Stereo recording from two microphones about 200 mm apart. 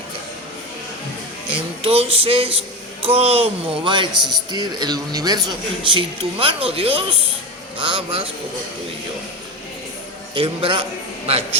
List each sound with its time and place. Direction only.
1.5 s a sound: 30° right (ahead or behind)
3.2 s speech: 30° right (ahead or behind)
10.3 s speech: 25° right (ahead or behind)